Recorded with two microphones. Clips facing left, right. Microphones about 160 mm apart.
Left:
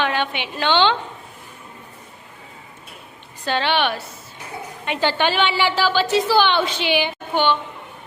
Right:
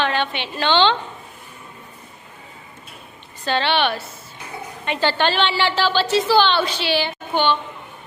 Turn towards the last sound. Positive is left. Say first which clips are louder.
# even
turn(degrees=15)  # may be behind; listen again after turning